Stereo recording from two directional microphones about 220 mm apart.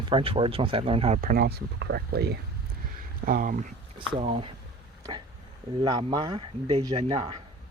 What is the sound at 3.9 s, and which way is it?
Speech, 25° right (ahead or behind).